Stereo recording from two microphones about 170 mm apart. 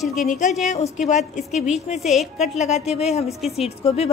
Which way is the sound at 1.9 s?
Centre (ahead or behind).